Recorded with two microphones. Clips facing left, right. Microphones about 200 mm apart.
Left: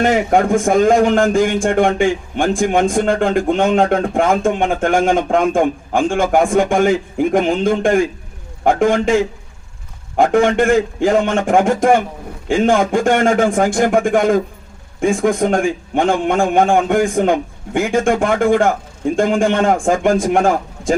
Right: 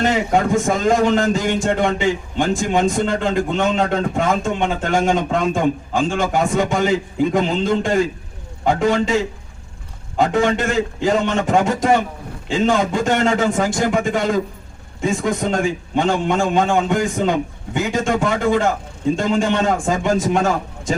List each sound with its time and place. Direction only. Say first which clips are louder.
0.0 s a man's voice: left 3 dB; 50° left (ahead or behind)
10.2 s a man's voice: left 4 dB; 50° left (ahead or behind)